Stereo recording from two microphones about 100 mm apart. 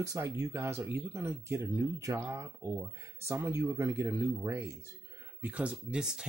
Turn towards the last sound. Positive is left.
turn(degrees=-5)  # may be behind; listen again after turning